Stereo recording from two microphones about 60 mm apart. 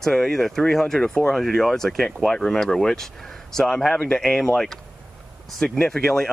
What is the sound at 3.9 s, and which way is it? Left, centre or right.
Speech, centre.